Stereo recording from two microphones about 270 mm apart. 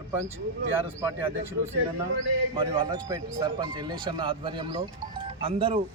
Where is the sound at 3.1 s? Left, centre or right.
Centre.